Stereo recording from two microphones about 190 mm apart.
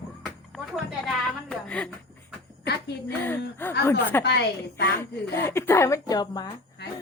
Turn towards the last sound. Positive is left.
turn(degrees=20)  # may be behind; listen again after turning